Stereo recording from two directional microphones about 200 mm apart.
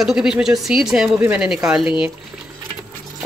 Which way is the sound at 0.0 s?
5° right (ahead or behind).